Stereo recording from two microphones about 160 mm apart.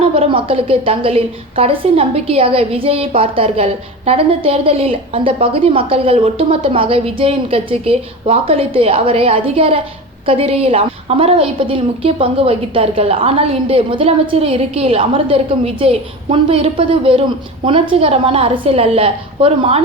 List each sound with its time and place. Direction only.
0.0 s a woman's voice: 35° right (ahead or behind)